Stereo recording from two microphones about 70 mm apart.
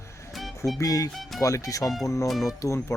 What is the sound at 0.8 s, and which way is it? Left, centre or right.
Speech, left.